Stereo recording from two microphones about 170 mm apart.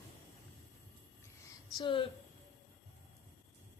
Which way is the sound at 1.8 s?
30° left (ahead or behind).